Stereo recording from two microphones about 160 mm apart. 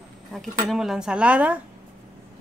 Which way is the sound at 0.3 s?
Centre (ahead or behind).